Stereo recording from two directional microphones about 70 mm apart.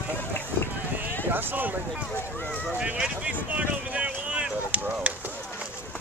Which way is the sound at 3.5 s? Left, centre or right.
Right.